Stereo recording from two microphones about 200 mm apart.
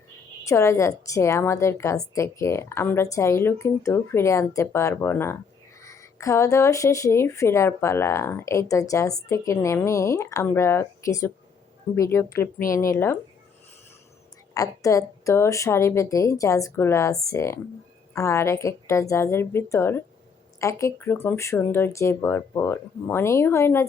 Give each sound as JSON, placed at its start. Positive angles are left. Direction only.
{"t": 0.4, "sound": "speech", "side_deg": 15}
{"t": 14.5, "sound": "speech", "side_deg": 15}